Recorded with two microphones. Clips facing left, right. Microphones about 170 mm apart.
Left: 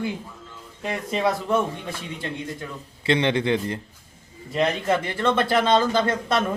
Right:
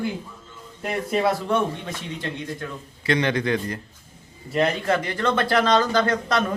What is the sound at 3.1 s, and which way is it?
Speech, 25° left (ahead or behind).